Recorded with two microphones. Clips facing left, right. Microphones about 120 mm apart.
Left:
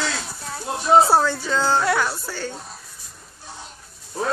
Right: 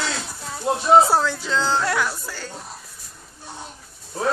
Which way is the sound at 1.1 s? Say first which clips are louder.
Left 2 dB; 10° left (ahead or behind).